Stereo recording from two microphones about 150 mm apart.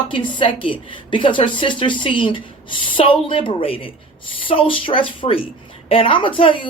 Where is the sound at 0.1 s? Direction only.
35° left (ahead or behind).